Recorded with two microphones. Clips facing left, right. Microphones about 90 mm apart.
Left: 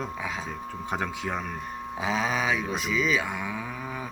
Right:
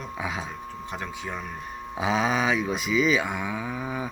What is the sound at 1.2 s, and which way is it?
Speech, 75° left (ahead or behind).